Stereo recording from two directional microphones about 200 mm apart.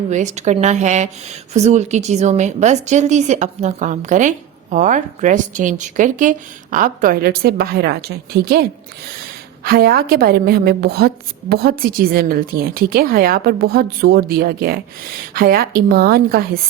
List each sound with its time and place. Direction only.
0.1 s a woman's voice: 35° right (ahead or behind); by 8.6 s 50° right (ahead or behind)
9.6 s a woman's voice: 50° right (ahead or behind)